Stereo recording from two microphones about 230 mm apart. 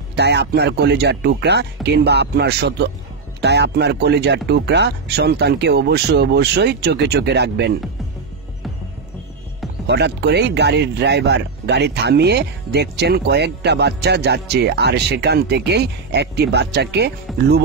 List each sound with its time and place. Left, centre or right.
0.1 s speech: right
9.8 s speech: right